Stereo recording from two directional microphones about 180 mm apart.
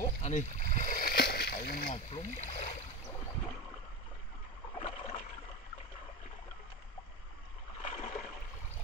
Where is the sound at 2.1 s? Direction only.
40° left (ahead or behind).